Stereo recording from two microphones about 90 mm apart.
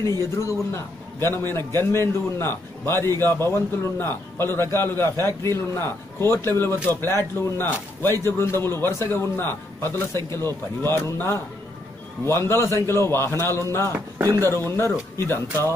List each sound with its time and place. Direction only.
0.4 s a man's voice: 30° left (ahead or behind)
1.6 s a man's voice: 45° right (ahead or behind)
1.9 s a man's voice: 30° left (ahead or behind)
14.2 s speech: 40° right (ahead or behind)
14.5 s a man's voice: 30° left (ahead or behind)